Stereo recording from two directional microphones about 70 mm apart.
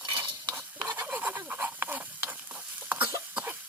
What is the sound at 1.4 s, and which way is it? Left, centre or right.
Fowl, right.